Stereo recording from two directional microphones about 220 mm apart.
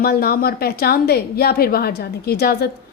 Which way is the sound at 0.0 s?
45° left (ahead or behind).